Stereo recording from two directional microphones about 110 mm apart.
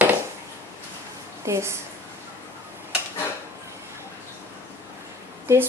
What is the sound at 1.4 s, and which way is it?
Speech, 25° right (ahead or behind).